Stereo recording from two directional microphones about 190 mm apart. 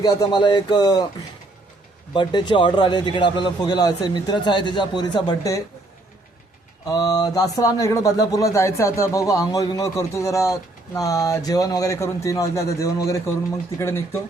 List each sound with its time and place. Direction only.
0.0 s speech: 20° left (ahead or behind)
2.1 s speech: 25° left (ahead or behind)
6.8 s speech: 20° left (ahead or behind)